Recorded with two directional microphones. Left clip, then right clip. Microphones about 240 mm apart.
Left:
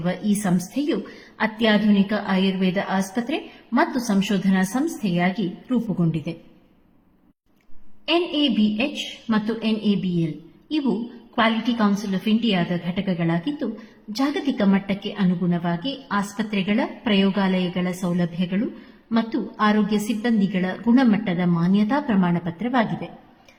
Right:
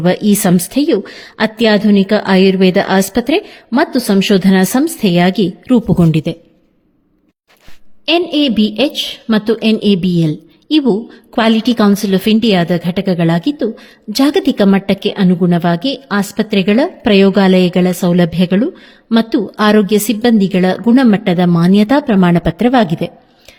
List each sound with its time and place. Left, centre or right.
0.0 s a woman's voice: right
8.0 s a woman's voice: right